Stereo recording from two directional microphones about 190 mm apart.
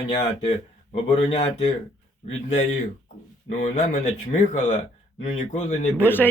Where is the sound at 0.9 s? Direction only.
30° left (ahead or behind).